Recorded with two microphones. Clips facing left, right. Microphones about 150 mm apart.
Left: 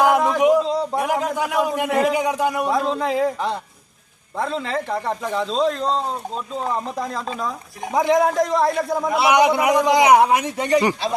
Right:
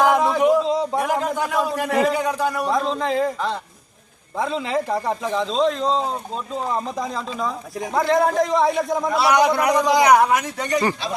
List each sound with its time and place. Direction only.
0.0 s a sound: 10° left (ahead or behind)
0.6 s a sound: centre (ahead or behind); by 2.0 s 15° left (ahead or behind)
2.0 s a man's voice: 15° left (ahead or behind)
4.4 s a man's voice: centre (ahead or behind)
7.0 s a man's voice: centre (ahead or behind)
7.9 s a man's voice: 15° left (ahead or behind)